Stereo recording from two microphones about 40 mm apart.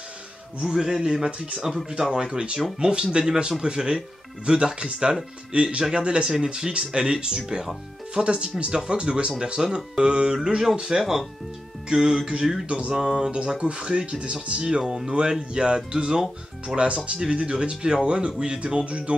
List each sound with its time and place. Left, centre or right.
0.7 s a man's voice: centre; by 12.9 s right
12.9 s a man's voice: centre
13.5 s speech: right